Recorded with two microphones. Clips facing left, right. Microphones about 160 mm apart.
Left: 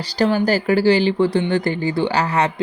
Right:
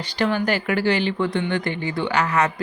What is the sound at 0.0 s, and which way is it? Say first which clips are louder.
Speech: left 4 dB; 35° left (ahead or behind).